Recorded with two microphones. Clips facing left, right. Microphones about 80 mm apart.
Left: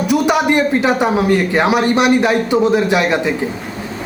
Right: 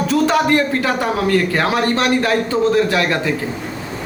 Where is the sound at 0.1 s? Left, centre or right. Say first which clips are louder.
Left 1 dB; centre.